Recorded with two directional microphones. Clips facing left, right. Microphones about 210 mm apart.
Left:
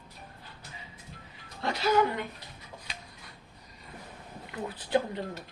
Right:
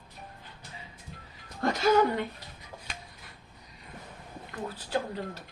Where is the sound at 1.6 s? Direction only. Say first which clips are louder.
Right 2 dB; 40° right (ahead or behind).